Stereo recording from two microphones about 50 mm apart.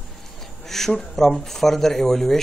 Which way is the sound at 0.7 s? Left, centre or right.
Centre.